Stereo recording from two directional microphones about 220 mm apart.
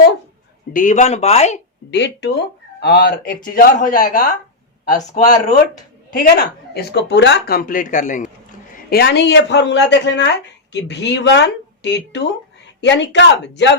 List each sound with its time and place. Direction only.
0.7 s a man's voice: 35° left (ahead or behind)
1.9 s a man's voice: 50° left (ahead or behind); by 5.2 s 35° left (ahead or behind)
6.1 s speech: 45° left (ahead or behind)
8.9 s speech: 45° left (ahead or behind)